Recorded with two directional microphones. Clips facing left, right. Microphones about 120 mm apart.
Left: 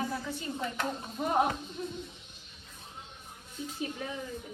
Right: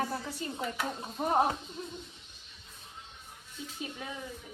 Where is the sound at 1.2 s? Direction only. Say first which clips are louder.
Right 1 dB; 35° right (ahead or behind).